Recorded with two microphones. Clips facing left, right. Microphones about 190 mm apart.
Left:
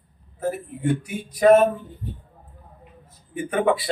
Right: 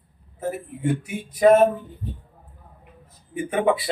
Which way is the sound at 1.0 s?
25° right (ahead or behind).